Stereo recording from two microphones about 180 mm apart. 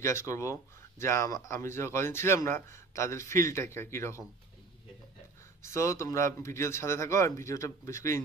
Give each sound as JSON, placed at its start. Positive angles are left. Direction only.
{"t": 0.0, "sound": "speech", "side_deg": 15}
{"t": 5.6, "sound": "speech", "side_deg": 15}